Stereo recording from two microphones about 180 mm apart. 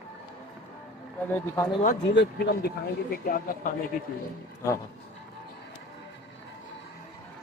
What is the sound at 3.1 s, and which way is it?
Speech, 50° left (ahead or behind).